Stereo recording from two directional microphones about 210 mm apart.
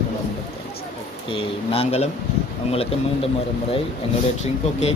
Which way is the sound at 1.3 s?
25° left (ahead or behind).